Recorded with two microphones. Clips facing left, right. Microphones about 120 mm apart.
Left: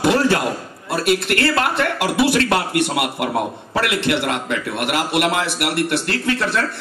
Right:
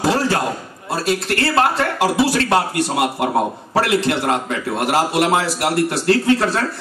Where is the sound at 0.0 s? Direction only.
30° right (ahead or behind).